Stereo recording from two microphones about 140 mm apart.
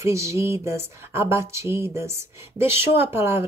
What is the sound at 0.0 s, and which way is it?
Speech, 20° right (ahead or behind).